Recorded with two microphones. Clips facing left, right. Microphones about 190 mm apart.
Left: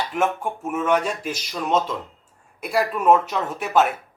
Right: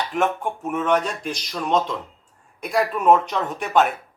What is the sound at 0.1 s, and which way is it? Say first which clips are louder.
Speech: right 1 dB; 5° left (ahead or behind).